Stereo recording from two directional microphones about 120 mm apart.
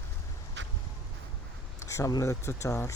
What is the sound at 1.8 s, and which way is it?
Speech, 25° left (ahead or behind).